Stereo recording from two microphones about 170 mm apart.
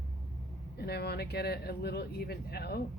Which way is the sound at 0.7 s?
70° left (ahead or behind).